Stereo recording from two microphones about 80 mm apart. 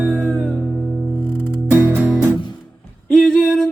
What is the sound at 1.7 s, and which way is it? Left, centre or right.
Music, right.